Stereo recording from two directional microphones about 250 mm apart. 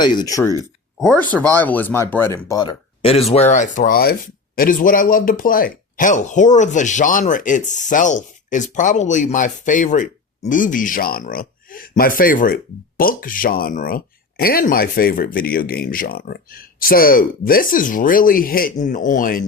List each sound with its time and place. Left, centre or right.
0.0 s speech: centre; by 19.5 s left